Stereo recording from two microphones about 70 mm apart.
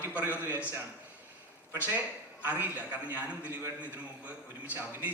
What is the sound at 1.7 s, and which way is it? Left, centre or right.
A man's voice, right.